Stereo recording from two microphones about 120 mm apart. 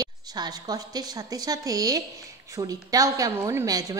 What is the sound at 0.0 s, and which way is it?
A woman's voice, 35° right (ahead or behind).